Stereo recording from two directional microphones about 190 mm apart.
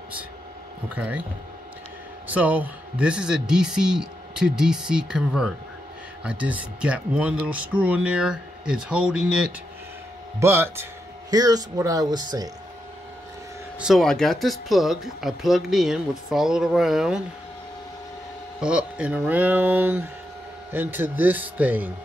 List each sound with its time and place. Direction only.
0.9 s speech: 10° right (ahead or behind)
2.2 s speech: 10° right (ahead or behind)
13.7 s speech: centre (ahead or behind)
18.6 s speech: 5° right (ahead or behind)